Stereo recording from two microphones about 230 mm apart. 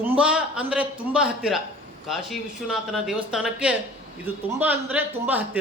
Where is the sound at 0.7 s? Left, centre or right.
Centre.